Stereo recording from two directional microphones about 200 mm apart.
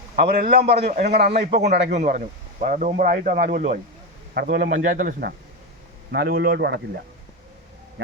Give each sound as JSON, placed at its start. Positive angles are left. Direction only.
{"t": 0.2, "sound": "a man's voice", "side_deg": -50}
{"t": 1.5, "sound": "a man's voice", "side_deg": -35}